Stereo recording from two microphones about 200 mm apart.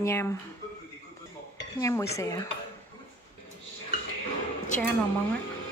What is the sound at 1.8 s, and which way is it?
Speech, 15° left (ahead or behind).